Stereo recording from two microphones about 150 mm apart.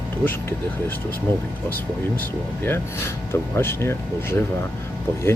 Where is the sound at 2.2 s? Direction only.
15° left (ahead or behind).